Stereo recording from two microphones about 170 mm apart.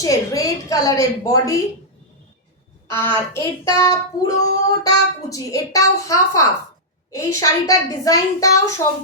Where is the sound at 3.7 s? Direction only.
20° left (ahead or behind).